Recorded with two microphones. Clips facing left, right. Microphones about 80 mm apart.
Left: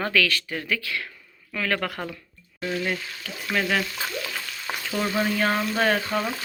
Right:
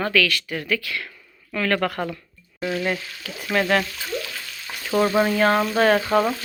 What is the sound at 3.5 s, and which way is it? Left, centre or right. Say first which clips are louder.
Speech: right 4 dB; centre.